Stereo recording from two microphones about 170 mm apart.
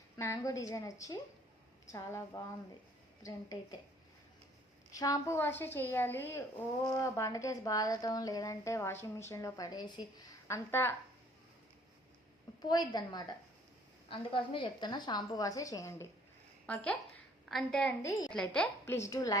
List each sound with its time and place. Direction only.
0.2 s a woman's voice: 20° left (ahead or behind)
4.9 s a woman's voice: 20° left (ahead or behind)
12.6 s a woman's voice: 25° left (ahead or behind); by 17.9 s 5° left (ahead or behind)
18.0 s a woman's voice: 15° left (ahead or behind)
18.3 s a woman's voice: 5° left (ahead or behind)